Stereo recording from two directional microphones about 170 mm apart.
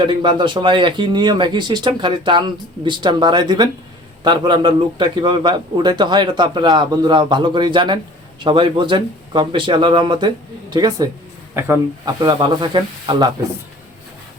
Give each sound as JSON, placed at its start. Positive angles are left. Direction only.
{"t": 0.0, "sound": "a man's voice", "side_deg": -30}